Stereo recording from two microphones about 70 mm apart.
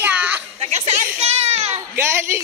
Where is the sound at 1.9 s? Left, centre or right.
Right.